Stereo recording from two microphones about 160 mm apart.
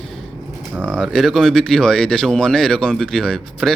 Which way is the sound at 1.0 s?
Centre (ahead or behind).